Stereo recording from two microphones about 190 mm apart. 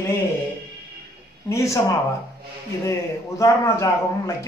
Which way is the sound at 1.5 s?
15° left (ahead or behind).